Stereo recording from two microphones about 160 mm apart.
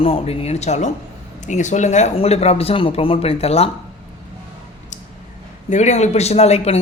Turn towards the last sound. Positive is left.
turn(degrees=40)  # may be behind; listen again after turning